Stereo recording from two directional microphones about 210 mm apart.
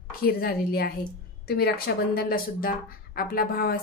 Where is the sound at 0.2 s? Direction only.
45° left (ahead or behind).